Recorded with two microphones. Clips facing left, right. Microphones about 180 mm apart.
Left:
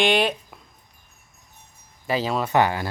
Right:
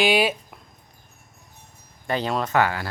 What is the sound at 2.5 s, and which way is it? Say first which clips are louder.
Speech: left 2 dB; 20° left (ahead or behind).